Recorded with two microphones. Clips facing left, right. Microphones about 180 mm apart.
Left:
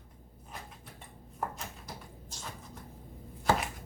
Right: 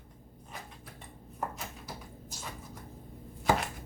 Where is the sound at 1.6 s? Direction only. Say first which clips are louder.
Right 1 dB; 5° right (ahead or behind).